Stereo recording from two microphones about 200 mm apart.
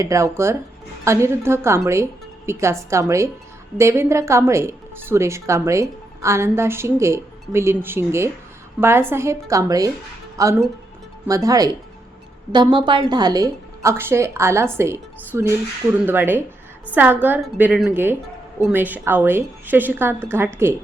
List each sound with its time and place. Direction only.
0.0 s speech: 15° right (ahead or behind)